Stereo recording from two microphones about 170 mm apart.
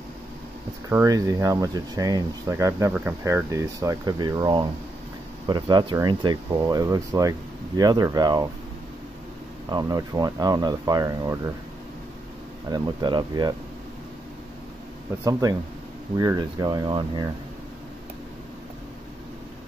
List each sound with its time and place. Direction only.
0.8 s speech: 20° right (ahead or behind)
9.7 s speech: 25° right (ahead or behind)
12.7 s speech: 25° right (ahead or behind)
16.2 s speech: 25° right (ahead or behind)